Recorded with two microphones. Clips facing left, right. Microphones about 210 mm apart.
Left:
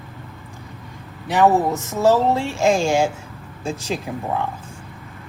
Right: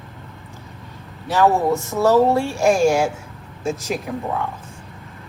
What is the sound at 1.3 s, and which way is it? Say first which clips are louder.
Speech: even; 20° left (ahead or behind).